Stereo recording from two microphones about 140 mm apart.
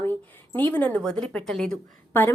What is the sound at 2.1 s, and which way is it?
Speech, 15° left (ahead or behind).